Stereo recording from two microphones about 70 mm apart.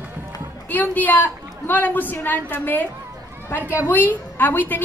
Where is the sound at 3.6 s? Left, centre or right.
Right.